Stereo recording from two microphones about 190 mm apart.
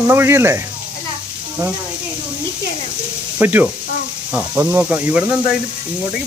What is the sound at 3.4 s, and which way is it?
Speech, 10° right (ahead or behind).